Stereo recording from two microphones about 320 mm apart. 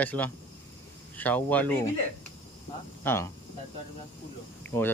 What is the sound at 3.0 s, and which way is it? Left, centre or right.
Speech, centre.